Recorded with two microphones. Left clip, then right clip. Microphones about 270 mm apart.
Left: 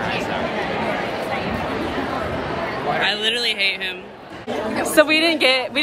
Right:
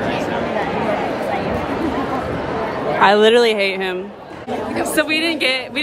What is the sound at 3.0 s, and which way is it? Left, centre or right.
Speech, right.